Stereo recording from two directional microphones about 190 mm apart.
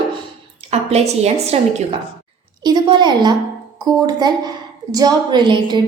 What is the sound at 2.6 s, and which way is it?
A woman's voice, 20° right (ahead or behind).